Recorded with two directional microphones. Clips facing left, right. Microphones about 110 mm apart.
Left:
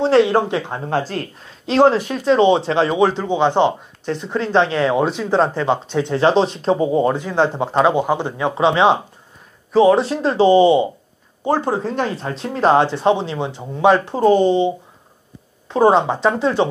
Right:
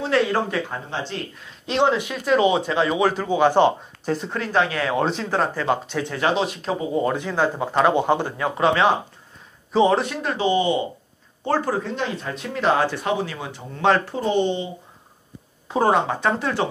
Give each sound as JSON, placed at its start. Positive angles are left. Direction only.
{"t": 0.0, "sound": "speech", "side_deg": 30}
{"t": 0.8, "sound": "speech", "side_deg": 45}
{"t": 4.0, "sound": "speech", "side_deg": -5}
{"t": 4.3, "sound": "speech", "side_deg": 25}
{"t": 5.0, "sound": "speech", "side_deg": 5}
{"t": 5.3, "sound": "speech", "side_deg": 25}
{"t": 9.7, "sound": "speech", "side_deg": 0}
{"t": 10.0, "sound": "speech", "side_deg": 30}
{"t": 11.8, "sound": "speech", "side_deg": 40}
{"t": 14.1, "sound": "speech", "side_deg": 40}
{"t": 15.8, "sound": "speech", "side_deg": 20}